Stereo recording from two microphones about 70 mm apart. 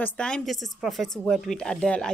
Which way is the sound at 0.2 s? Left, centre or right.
Centre.